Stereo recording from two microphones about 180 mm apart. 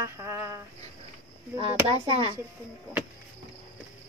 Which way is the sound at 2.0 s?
35° right (ahead or behind).